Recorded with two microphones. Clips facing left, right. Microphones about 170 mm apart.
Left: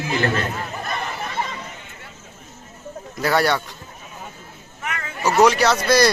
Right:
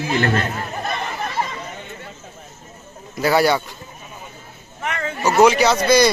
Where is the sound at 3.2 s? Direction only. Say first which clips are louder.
Right 3 dB; 5° right (ahead or behind).